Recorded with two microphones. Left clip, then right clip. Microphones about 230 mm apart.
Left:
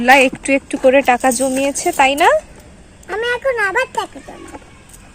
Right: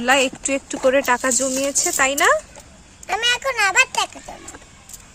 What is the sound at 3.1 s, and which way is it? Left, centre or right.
Speech, right.